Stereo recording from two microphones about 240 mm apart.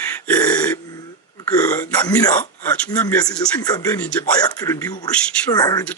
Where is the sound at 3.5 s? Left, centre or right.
Centre.